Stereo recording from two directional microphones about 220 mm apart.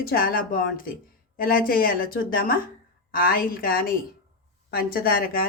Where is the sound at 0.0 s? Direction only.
40° left (ahead or behind).